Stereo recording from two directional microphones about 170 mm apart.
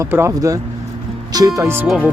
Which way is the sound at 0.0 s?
15° right (ahead or behind).